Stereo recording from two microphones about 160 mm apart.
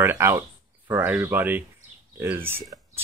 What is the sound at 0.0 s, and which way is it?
Speech, 15° right (ahead or behind).